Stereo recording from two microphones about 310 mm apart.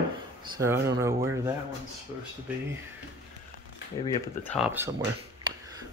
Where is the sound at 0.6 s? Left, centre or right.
Centre.